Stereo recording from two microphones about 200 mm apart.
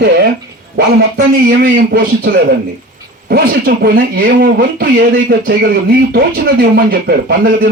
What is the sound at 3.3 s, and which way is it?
Speech, 50° right (ahead or behind).